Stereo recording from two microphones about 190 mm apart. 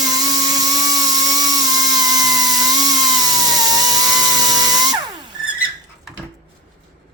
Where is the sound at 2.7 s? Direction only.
20° right (ahead or behind).